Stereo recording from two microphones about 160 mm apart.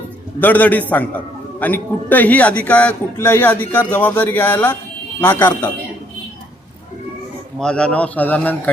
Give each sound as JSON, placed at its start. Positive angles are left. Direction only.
{"t": 0.3, "sound": "a man's voice", "side_deg": 10}
{"t": 7.6, "sound": "a man's voice", "side_deg": 5}